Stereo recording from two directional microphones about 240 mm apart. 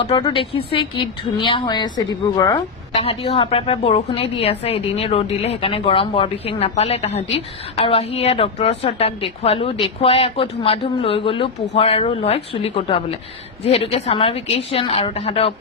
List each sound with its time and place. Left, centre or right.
0.0 s speech: centre